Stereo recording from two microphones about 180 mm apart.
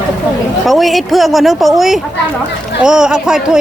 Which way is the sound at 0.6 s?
Centre (ahead or behind).